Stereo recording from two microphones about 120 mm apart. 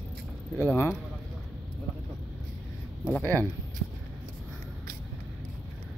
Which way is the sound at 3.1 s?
15° left (ahead or behind).